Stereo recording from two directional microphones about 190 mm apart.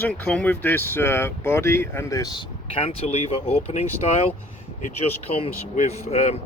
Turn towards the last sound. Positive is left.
turn(degrees=35)  # may be behind; listen again after turning